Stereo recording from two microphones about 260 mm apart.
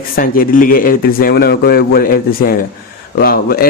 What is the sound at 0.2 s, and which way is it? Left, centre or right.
A man's voice, left.